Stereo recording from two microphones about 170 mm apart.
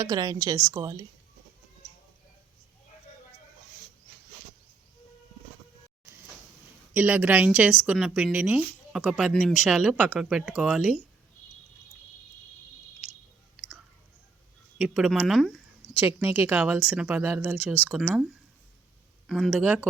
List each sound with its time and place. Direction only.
0.0 s a woman's voice: 25° right (ahead or behind)
6.9 s a woman's voice: 10° right (ahead or behind)
13.6 s chewing: centre (ahead or behind)
14.8 s a woman's voice: 5° right (ahead or behind)
16.0 s speech: 15° right (ahead or behind)
19.3 s a woman's voice: centre (ahead or behind)